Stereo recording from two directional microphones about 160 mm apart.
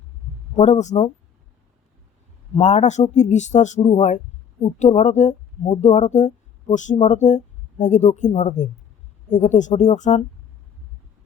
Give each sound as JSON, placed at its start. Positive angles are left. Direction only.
{"t": 0.6, "sound": "speech", "side_deg": 45}
{"t": 2.6, "sound": "speech", "side_deg": 45}